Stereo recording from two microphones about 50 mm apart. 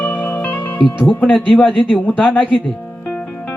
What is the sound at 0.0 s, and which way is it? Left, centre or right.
Music, left.